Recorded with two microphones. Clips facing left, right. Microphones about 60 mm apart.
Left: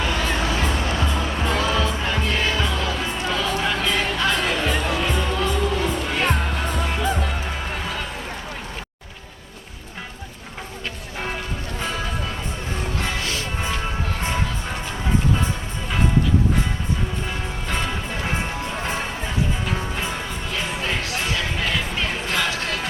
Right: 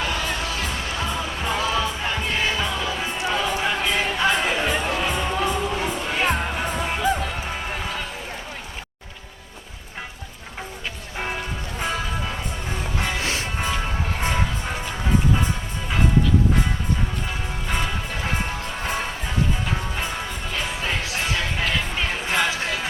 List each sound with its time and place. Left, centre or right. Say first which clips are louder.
0.3 s music: left 4 dB; left
1.5 s music: left 1 dB; centre
13.2 s music: right 1 dB; right
14.2 s music: right 3 dB; centre
17.7 s music: even; centre
21.6 s a sound: even; centre